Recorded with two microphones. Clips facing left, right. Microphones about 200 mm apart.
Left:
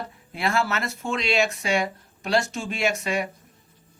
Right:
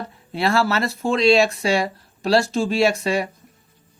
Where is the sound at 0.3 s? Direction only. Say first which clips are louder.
Right 5 dB; 35° right (ahead or behind).